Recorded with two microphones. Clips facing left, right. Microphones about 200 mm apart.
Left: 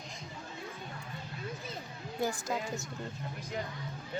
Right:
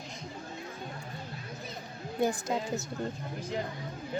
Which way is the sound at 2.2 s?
20° right (ahead or behind).